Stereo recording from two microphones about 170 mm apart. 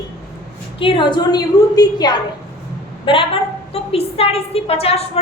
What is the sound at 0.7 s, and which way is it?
A woman's voice, 30° left (ahead or behind).